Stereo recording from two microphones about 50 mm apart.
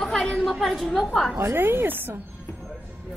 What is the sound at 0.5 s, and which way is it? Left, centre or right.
Speech, centre.